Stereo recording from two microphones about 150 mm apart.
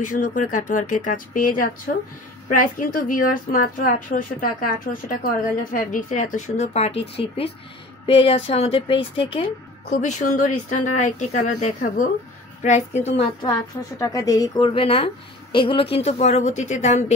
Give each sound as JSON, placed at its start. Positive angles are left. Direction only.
{"t": 0.0, "sound": "a woman's voice", "side_deg": 60}
{"t": 10.0, "sound": "a woman's voice", "side_deg": 55}
{"t": 13.5, "sound": "a woman's voice", "side_deg": 25}
{"t": 14.7, "sound": "a woman's voice", "side_deg": 35}